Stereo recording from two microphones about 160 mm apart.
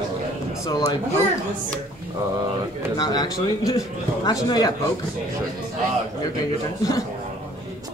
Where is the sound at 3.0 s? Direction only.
25° left (ahead or behind).